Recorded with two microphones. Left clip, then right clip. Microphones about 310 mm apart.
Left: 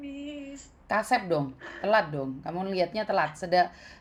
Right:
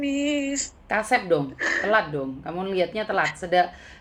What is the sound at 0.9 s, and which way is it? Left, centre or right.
A woman's voice, left.